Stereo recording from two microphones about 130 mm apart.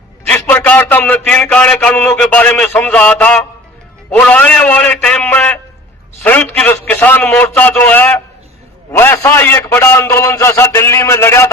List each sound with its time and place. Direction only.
0.3 s a man's voice: 15° left (ahead or behind)
4.1 s a sound: 10° left (ahead or behind)
6.2 s a man's voice: 15° left (ahead or behind)